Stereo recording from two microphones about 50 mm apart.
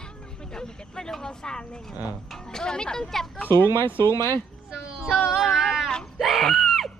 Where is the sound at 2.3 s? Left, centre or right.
Centre.